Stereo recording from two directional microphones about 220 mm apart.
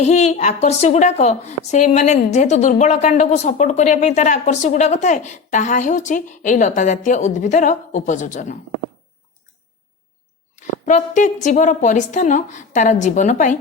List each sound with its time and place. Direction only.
0.0 s a woman's voice: 30° left (ahead or behind)
10.5 s a woman's voice: 35° left (ahead or behind)